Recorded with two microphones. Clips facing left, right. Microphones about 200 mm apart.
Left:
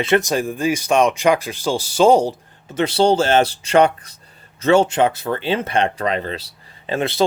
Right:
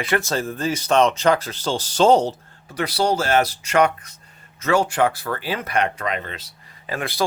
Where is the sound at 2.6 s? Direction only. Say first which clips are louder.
Left 6 dB; 25° left (ahead or behind).